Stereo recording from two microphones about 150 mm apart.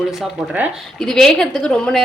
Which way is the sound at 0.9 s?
5° left (ahead or behind).